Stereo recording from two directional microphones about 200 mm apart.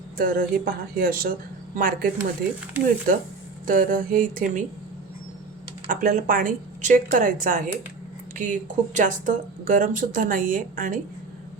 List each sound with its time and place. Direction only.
0.2 s speech: 45° right (ahead or behind)
3.1 s speech: 45° right (ahead or behind)
5.9 s speech: 45° right (ahead or behind)